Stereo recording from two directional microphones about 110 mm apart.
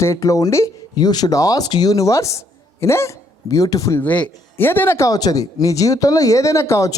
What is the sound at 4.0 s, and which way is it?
Speech, 15° left (ahead or behind).